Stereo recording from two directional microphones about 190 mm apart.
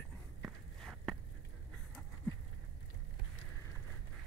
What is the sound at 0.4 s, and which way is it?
Walk, centre (ahead or behind).